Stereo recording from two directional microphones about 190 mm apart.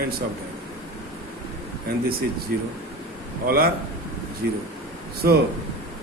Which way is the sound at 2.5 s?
50° right (ahead or behind).